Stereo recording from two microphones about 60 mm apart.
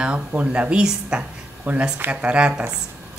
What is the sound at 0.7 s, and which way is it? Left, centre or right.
A woman's voice, centre.